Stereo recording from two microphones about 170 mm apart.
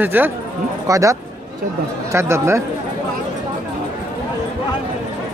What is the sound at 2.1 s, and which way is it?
Speech, 15° right (ahead or behind).